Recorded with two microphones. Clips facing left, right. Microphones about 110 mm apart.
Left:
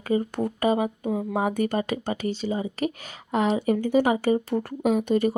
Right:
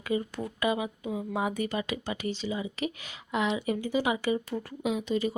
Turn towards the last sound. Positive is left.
turn(degrees=55)  # may be behind; listen again after turning